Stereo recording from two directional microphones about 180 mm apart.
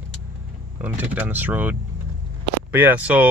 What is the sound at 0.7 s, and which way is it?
Speech, 10° right (ahead or behind).